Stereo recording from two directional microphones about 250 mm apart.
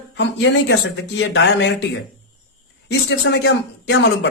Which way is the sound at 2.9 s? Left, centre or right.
Left.